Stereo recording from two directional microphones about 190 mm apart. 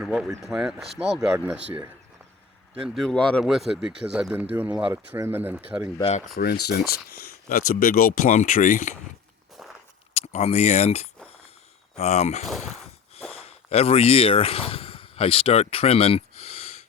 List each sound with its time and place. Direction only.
0.0 s speech: 5° right (ahead or behind)
2.8 s speech: centre (ahead or behind)
6.0 s speech: 35° left (ahead or behind)
6.3 s speech: 60° left (ahead or behind); by 9.0 s 40° left (ahead or behind)
9.6 s biting: centre (ahead or behind)
10.2 s speech: 35° left (ahead or behind)
12.5 s speech: centre (ahead or behind)
13.3 s speech: 35° left (ahead or behind)